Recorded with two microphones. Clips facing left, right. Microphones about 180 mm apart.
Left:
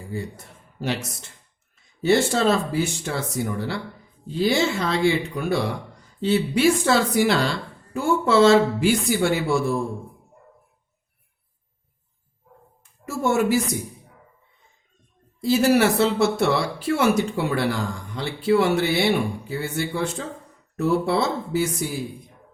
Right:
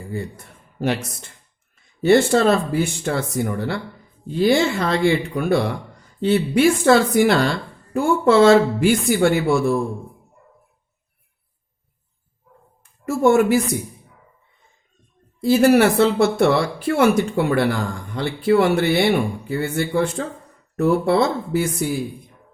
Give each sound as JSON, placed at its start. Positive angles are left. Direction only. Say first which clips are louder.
{"t": 0.1, "sound": "a man's voice", "louder": "right 2 dB", "side_deg": -55}
{"t": 13.1, "sound": "speech", "louder": "right 6 dB", "side_deg": -55}
{"t": 15.4, "sound": "speech", "louder": "right 4 dB", "side_deg": -55}